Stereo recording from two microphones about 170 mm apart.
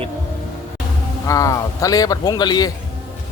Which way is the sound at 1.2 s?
20° left (ahead or behind).